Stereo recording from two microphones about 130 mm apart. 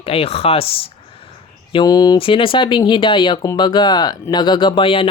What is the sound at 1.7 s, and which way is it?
Speech, 35° left (ahead or behind).